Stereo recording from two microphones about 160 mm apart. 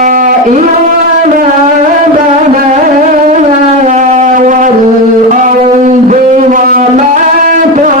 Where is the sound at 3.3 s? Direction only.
50° right (ahead or behind).